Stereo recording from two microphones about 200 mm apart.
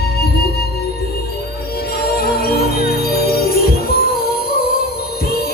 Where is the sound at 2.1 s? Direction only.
50° left (ahead or behind).